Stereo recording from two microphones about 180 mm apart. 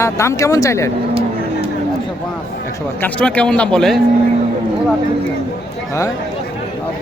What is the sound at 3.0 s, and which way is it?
Speech, 5° left (ahead or behind).